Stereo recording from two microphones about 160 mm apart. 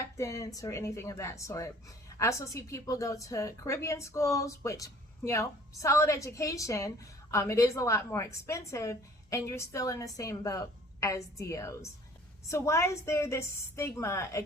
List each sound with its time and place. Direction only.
0.0 s a woman's voice: 20° left (ahead or behind)